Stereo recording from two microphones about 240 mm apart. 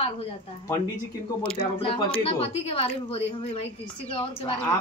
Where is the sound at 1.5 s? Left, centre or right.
Left.